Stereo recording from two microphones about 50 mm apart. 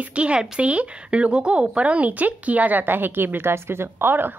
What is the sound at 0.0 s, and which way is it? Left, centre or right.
Speech, right.